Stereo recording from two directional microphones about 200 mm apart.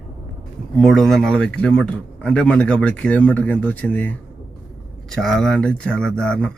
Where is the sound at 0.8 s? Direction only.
Centre (ahead or behind).